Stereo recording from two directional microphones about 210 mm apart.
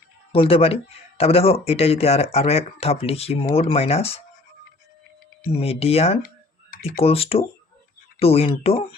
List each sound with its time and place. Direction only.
0.3 s speech: 25° left (ahead or behind)
5.5 s speech: 30° left (ahead or behind)